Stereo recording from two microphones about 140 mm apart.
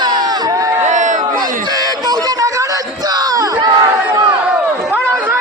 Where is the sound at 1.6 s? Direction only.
30° right (ahead or behind).